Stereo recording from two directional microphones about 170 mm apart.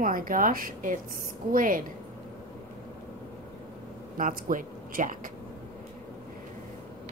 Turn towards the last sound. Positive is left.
turn(degrees=-50)  # may be behind; listen again after turning